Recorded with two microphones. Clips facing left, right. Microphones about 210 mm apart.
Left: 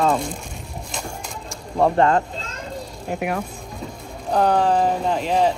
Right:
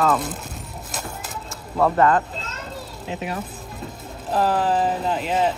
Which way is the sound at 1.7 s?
30° left (ahead or behind).